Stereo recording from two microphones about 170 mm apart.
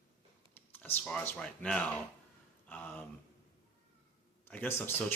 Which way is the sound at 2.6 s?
10° left (ahead or behind).